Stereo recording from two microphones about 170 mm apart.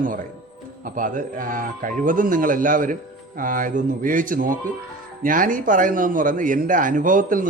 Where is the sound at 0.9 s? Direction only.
50° right (ahead or behind).